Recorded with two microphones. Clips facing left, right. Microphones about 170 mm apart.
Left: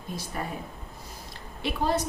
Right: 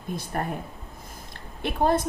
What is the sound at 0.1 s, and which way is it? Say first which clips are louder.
Speech: right 4 dB; 55° right (ahead or behind).